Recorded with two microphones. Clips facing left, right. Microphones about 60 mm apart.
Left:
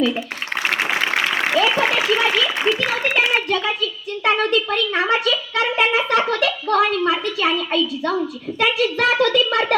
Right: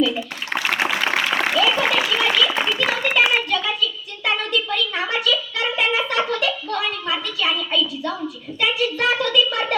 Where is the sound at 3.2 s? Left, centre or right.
Left.